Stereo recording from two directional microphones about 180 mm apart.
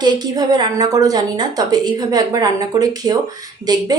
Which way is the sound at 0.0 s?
20° right (ahead or behind).